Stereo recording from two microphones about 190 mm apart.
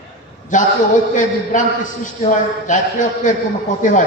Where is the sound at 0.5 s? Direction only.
40° left (ahead or behind).